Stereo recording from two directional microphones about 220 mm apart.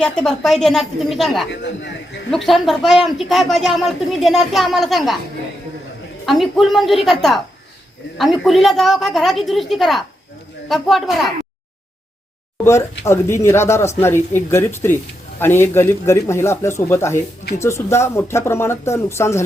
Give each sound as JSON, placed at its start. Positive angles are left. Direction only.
{"t": 0.0, "sound": "speech", "side_deg": 5}
{"t": 1.6, "sound": "a man's voice", "side_deg": 50}
{"t": 2.3, "sound": "speech", "side_deg": 0}
{"t": 6.2, "sound": "speech", "side_deg": 0}
{"t": 12.6, "sound": "speech", "side_deg": 10}